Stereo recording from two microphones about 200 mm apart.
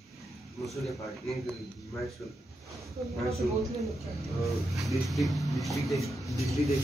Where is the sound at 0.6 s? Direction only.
Centre (ahead or behind).